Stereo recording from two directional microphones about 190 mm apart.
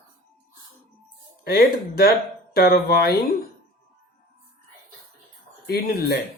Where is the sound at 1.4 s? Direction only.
55° left (ahead or behind).